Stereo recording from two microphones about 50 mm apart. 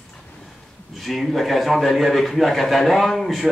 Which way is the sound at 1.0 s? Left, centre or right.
Centre.